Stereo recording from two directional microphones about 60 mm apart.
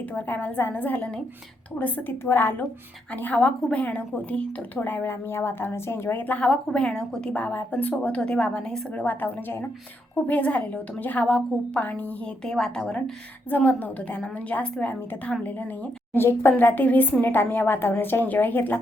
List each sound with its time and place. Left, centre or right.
0.1 s a woman's voice: left
2.2 s a woman's voice: left
3.2 s a woman's voice: centre; by 6.2 s left
6.4 s a woman's voice: centre
9.0 s a woman's voice: left
10.2 s a woman's voice: left
12.5 s a woman's voice: centre
13.5 s a woman's voice: left
14.6 s a woman's voice: centre
16.1 s a woman's voice: left